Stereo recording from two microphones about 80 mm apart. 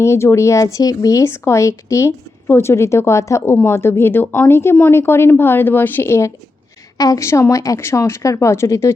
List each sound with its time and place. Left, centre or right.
0.0 s speech: left
1.2 s speech: left
6.9 s speech: left